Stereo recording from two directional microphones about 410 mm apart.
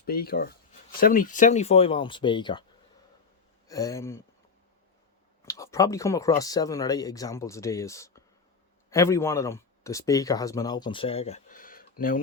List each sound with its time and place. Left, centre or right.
0.0 s speech: left
3.7 s speech: centre
5.5 s speech: centre